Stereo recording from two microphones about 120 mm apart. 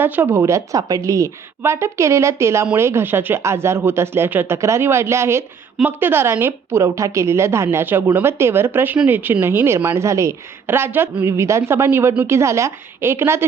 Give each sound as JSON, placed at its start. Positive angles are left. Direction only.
{"t": 0.0, "sound": "a woman's voice", "side_deg": -15}